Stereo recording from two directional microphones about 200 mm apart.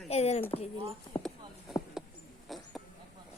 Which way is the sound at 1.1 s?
25° left (ahead or behind).